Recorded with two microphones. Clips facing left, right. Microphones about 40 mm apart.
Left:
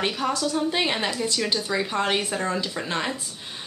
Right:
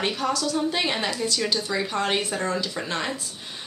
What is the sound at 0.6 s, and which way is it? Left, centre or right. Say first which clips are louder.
Speech: left 1 dB; centre.